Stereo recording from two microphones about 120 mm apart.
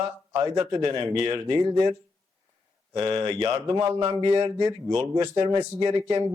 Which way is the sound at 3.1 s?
35° right (ahead or behind).